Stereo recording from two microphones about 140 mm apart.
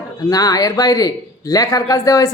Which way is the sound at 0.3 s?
25° left (ahead or behind).